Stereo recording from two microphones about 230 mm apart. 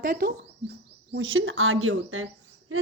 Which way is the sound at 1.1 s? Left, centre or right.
Right.